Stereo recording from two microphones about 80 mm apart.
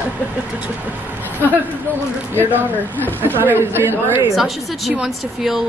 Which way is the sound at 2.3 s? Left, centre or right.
Right.